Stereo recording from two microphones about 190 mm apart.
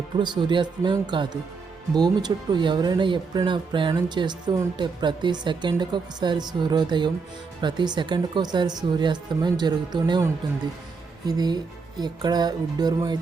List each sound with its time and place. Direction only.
0.2 s speech: 25° right (ahead or behind)